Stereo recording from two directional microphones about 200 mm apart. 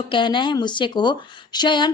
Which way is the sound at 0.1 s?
25° left (ahead or behind).